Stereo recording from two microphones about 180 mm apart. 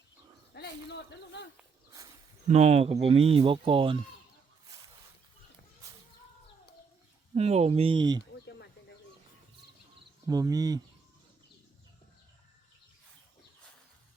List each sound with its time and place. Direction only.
0.5 s a man's voice: 65° left (ahead or behind)
2.5 s speech: 35° right (ahead or behind)
7.3 s speech: 35° right (ahead or behind)
10.2 s speech: 20° right (ahead or behind)